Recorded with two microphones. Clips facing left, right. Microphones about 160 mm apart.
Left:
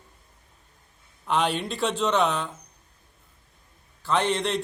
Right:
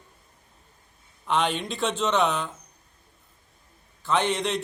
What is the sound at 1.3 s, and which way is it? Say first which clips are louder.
A man's voice: even; 5° left (ahead or behind).